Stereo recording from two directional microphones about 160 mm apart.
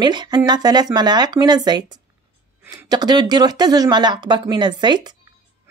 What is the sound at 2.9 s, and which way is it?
Speech, 25° right (ahead or behind).